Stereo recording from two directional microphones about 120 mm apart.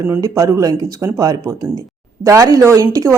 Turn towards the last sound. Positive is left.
turn(degrees=-25)  # may be behind; listen again after turning